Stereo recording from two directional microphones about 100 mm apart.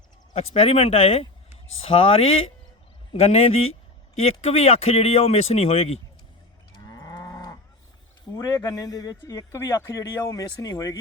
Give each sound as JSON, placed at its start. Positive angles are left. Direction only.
{"t": 0.3, "sound": "speech", "side_deg": 90}
{"t": 3.1, "sound": "speech", "side_deg": 90}
{"t": 6.8, "sound": "cattle", "side_deg": 40}
{"t": 8.3, "sound": "speech", "side_deg": 30}